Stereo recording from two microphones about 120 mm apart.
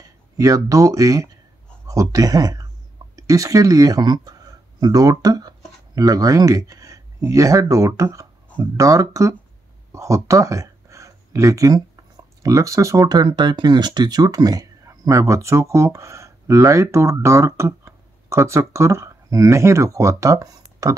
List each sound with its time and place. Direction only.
0.4 s speech: 30° right (ahead or behind)
9.9 s a sound: 25° right (ahead or behind)
12.4 s speech: 25° right (ahead or behind)